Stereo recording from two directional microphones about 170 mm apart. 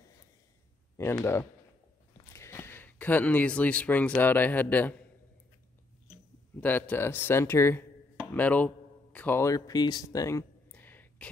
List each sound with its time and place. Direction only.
0.9 s speech: 15° left (ahead or behind)
6.6 s speech: 10° left (ahead or behind)